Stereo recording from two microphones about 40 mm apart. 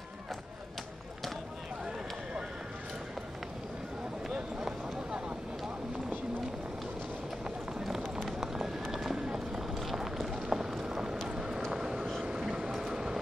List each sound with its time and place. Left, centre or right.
4.3 s a sound: right
8.3 s run: centre
8.9 s clip-clop: centre
9.8 s run: centre
10.5 s a sound: centre
11.2 s vehicle: centre